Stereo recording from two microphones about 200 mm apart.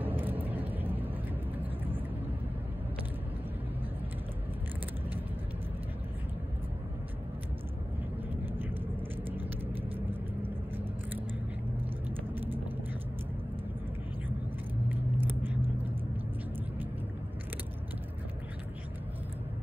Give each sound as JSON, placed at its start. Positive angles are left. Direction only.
{"t": 0.0, "sound": "vehicle", "side_deg": -10}
{"t": 14.9, "sound": "vehicle", "side_deg": -10}